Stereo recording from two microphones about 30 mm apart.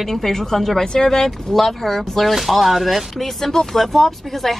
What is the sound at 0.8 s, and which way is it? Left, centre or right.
Speech, left.